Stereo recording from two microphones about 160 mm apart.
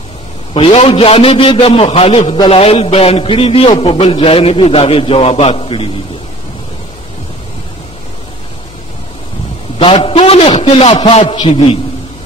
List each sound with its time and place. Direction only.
0.6 s a man's voice: 35° left (ahead or behind)
9.8 s a man's voice: 35° left (ahead or behind)